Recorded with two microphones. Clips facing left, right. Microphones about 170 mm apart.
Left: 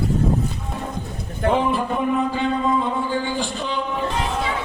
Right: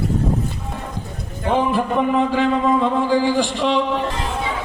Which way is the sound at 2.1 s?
90° right.